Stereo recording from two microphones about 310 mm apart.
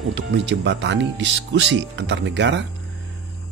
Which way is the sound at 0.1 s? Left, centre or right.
Right.